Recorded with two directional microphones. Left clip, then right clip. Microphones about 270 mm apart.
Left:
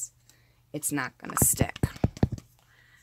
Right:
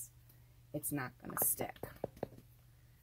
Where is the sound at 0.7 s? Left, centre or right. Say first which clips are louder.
Left 10 dB; left.